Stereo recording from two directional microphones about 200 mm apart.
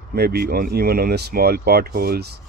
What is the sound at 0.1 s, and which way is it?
Speech, 50° right (ahead or behind).